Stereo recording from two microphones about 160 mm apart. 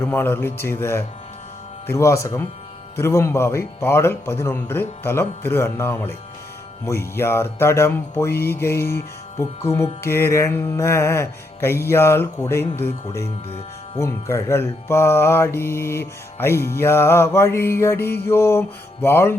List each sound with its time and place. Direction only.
0.0 s music: 15° left (ahead or behind)
1.9 s speech: 20° left (ahead or behind)
3.0 s music: 15° left (ahead or behind)